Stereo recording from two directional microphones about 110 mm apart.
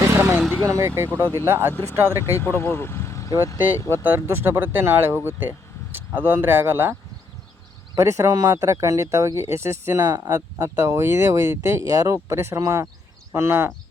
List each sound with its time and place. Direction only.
0.2 s vehicle: 20° right (ahead or behind)
0.6 s speech: 30° right (ahead or behind)
2.0 s speech: 25° left (ahead or behind)
4.0 s speech: 20° right (ahead or behind)
7.9 s speech: 25° right (ahead or behind)
11.9 s speech: 35° right (ahead or behind)